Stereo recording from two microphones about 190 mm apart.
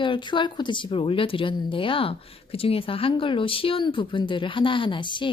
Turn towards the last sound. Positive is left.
turn(degrees=25)  # may be behind; listen again after turning